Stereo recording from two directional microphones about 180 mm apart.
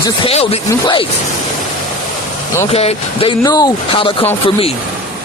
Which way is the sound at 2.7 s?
30° left (ahead or behind).